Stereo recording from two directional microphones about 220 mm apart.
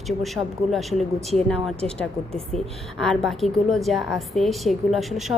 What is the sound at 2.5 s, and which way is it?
A woman's voice, centre (ahead or behind).